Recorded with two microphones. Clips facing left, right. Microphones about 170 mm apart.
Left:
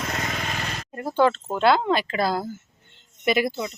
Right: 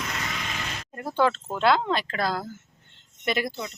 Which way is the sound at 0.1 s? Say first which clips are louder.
Left 4 dB; 45° left (ahead or behind).